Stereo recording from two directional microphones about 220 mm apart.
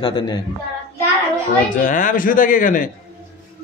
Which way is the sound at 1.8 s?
35° left (ahead or behind).